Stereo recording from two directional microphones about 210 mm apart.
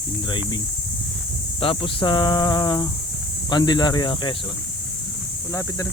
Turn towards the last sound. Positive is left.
turn(degrees=20)  # may be behind; listen again after turning